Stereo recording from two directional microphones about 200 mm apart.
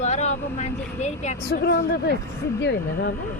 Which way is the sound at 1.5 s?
55° left (ahead or behind).